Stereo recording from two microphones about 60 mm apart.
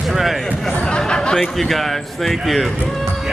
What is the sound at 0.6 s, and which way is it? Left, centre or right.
Speech, centre.